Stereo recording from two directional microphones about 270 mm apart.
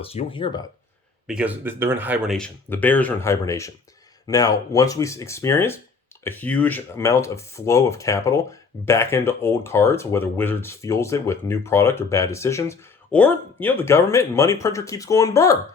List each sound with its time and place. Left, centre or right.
0.0 s speech: left
1.3 s speech: centre